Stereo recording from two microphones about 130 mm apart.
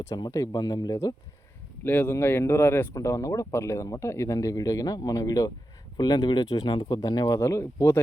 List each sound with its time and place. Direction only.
0.3 s speech: 25° left (ahead or behind)
1.8 s speech: 15° left (ahead or behind)